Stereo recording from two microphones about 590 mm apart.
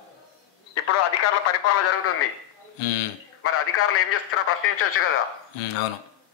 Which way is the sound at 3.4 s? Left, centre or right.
Left.